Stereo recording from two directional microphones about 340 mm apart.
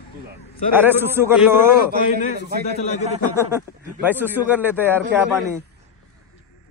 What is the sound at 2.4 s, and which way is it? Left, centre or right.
Speech, right.